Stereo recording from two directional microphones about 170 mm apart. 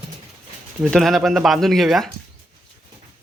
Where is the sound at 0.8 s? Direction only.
Centre (ahead or behind).